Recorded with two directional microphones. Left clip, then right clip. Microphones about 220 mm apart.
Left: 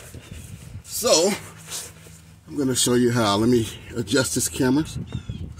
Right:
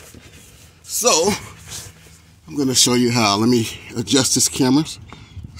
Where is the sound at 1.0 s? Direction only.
50° right (ahead or behind).